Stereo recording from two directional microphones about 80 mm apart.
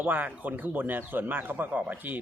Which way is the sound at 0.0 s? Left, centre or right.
Right.